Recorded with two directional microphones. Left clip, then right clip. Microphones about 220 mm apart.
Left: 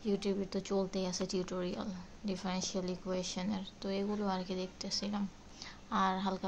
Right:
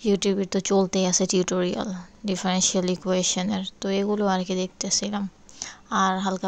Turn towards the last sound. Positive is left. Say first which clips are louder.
# right 10 dB
turn(degrees=-35)  # may be behind; listen again after turning